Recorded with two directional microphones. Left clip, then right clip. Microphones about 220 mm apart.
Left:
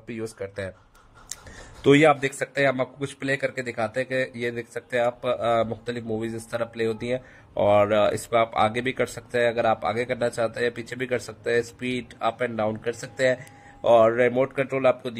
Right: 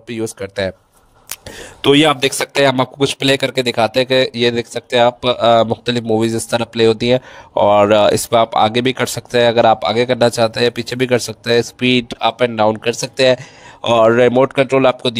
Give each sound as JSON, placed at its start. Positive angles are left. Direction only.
{"t": 0.1, "sound": "speech", "side_deg": -35}
{"t": 1.8, "sound": "speech", "side_deg": -40}